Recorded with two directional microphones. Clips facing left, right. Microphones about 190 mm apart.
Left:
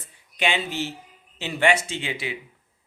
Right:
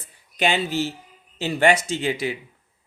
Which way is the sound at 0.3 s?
40° right (ahead or behind).